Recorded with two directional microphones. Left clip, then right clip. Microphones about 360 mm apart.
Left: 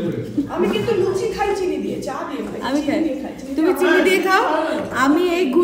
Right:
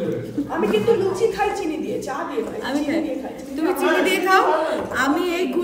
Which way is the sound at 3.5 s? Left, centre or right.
Centre.